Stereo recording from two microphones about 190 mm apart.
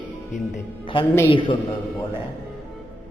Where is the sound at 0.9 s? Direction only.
25° left (ahead or behind).